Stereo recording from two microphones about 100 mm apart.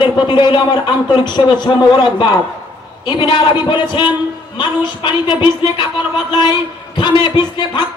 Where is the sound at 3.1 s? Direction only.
55° left (ahead or behind).